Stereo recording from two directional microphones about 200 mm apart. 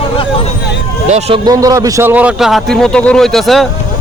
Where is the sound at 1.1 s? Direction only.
30° right (ahead or behind).